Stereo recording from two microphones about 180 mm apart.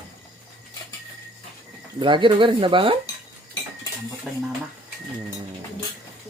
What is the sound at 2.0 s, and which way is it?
Speech, 25° right (ahead or behind).